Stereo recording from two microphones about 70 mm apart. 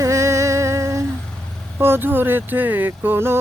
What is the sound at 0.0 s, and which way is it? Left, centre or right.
Music, right.